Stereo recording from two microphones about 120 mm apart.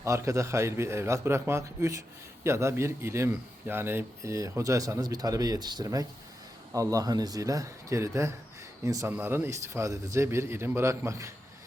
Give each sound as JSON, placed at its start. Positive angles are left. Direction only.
{"t": 0.0, "sound": "a man's voice", "side_deg": -25}